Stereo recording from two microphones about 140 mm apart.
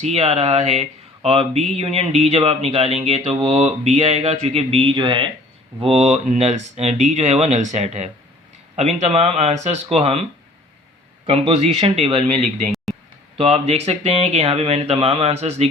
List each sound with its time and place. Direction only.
0.0 s speech: 45° right (ahead or behind)
5.8 s speech: 50° right (ahead or behind)
11.3 s speech: 45° right (ahead or behind)
12.7 s a sound: centre (ahead or behind)
13.3 s speech: 45° right (ahead or behind)